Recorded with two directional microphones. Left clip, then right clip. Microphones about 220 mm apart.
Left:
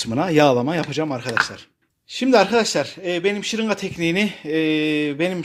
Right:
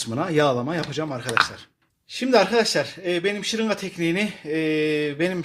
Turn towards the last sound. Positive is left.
turn(degrees=25)  # may be behind; listen again after turning